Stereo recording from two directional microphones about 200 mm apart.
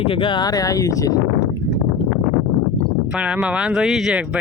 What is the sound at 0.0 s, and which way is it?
Speech, 25° left (ahead or behind).